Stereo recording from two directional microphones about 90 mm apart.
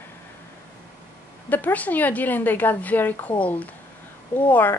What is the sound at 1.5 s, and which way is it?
A woman's voice, 20° left (ahead or behind).